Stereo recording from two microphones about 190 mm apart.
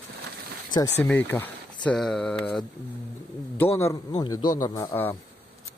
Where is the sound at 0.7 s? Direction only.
15° left (ahead or behind).